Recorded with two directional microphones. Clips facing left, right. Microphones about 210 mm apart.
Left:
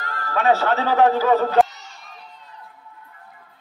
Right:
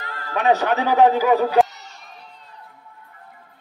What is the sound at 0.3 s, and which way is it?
Speech, 20° right (ahead or behind).